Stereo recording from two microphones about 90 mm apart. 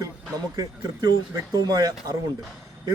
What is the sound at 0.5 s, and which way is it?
A man's voice, 40° right (ahead or behind).